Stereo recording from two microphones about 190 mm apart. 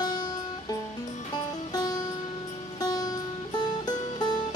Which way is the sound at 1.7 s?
20° left (ahead or behind).